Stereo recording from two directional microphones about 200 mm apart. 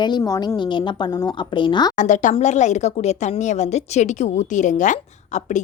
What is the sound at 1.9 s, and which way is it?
A woman's voice, 40° left (ahead or behind).